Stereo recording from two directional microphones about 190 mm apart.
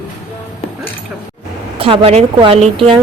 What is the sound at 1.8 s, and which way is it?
Speech, 30° right (ahead or behind).